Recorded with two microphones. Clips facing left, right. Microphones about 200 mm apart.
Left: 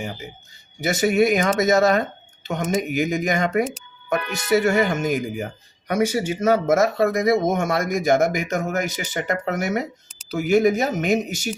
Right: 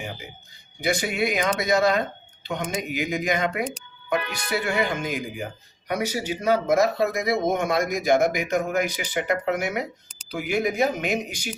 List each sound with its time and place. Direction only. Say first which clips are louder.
0.8 s speech: left 6 dB; 45° left (ahead or behind)